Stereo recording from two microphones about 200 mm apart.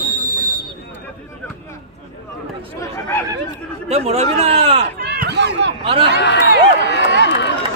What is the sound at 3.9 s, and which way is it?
Speech, 30° right (ahead or behind).